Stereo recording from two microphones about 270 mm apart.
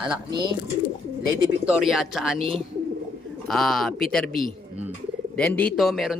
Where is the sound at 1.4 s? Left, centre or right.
Centre.